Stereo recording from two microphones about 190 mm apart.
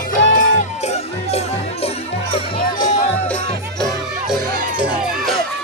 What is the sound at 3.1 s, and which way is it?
Music, 10° left (ahead or behind).